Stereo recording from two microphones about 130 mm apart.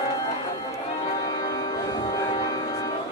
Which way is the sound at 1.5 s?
30° left (ahead or behind).